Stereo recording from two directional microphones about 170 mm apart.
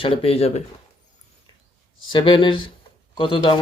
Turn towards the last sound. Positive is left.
turn(degrees=30)  # may be behind; listen again after turning